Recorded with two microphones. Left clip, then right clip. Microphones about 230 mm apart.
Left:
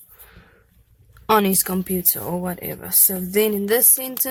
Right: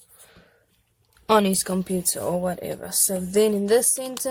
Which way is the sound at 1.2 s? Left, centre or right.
Left.